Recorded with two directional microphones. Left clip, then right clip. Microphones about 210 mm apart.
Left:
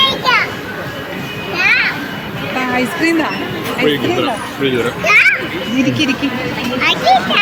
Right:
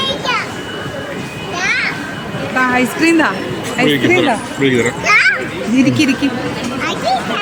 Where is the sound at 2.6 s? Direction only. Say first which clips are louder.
Right 3 dB; 10° right (ahead or behind).